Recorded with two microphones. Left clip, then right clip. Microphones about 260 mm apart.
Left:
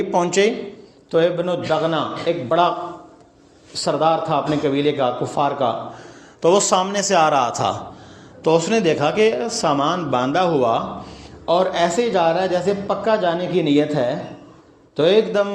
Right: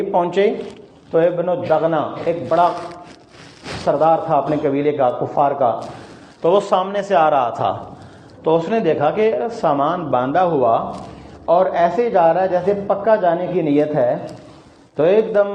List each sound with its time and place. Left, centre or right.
0.1 s speech: left
3.8 s speech: left